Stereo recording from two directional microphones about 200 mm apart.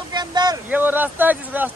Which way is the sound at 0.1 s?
20° right (ahead or behind).